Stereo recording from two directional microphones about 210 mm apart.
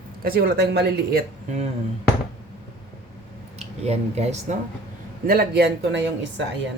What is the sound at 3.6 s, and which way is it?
Speech, 30° right (ahead or behind).